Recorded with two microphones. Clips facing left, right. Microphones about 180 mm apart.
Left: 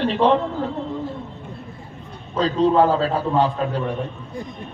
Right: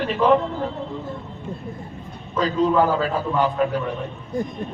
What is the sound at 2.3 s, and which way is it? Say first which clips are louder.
A man's voice: left 2 dB; 30° left (ahead or behind).